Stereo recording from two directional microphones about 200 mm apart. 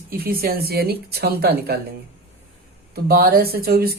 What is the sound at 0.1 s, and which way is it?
Speech, 50° right (ahead or behind).